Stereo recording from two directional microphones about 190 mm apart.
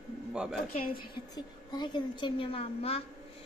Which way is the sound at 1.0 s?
25° left (ahead or behind).